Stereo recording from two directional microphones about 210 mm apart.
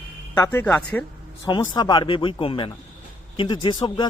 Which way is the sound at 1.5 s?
20° left (ahead or behind).